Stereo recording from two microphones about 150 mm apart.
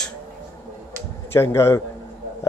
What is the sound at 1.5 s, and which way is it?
Speech, 20° left (ahead or behind).